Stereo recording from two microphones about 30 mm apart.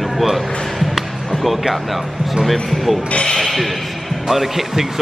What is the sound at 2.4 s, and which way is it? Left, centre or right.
Speech, centre.